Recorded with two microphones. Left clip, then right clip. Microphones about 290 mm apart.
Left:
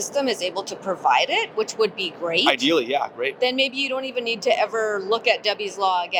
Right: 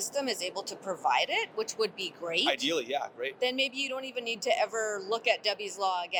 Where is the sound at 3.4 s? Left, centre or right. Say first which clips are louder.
Left 8 dB; right.